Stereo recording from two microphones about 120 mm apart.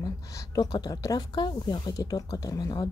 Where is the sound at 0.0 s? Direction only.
30° left (ahead or behind).